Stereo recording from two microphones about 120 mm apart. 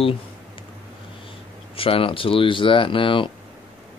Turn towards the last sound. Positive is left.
turn(degrees=45)  # may be behind; listen again after turning